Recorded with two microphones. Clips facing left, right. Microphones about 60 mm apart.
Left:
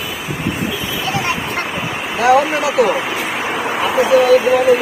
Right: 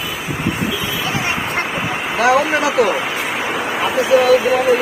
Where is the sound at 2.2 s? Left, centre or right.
Centre.